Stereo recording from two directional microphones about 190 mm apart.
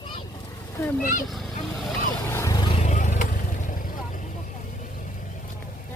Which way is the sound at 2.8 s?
40° left (ahead or behind).